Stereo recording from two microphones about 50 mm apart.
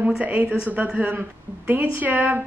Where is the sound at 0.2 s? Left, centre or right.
Right.